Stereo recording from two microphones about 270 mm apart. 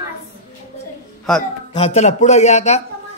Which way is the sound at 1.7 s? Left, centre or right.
Left.